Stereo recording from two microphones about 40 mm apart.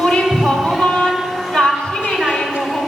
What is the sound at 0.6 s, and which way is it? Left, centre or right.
Music, centre.